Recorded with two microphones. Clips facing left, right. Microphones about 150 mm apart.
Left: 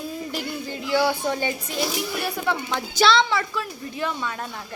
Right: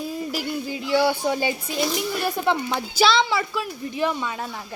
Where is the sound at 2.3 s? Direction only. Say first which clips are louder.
Right 3 dB; 20° right (ahead or behind).